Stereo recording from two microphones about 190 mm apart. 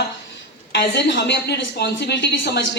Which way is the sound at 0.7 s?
65° left (ahead or behind).